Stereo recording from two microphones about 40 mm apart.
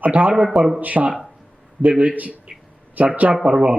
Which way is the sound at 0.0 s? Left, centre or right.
Right.